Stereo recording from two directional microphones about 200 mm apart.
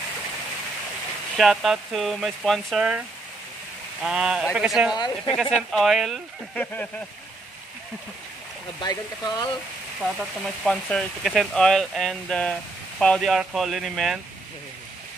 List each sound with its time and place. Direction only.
1.3 s speech: centre (ahead or behind)
4.0 s speech: 5° right (ahead or behind)
4.9 s speech: 20° left (ahead or behind)
5.6 s speech: centre (ahead or behind)
8.8 s speech: 20° left (ahead or behind)
10.1 s speech: centre (ahead or behind)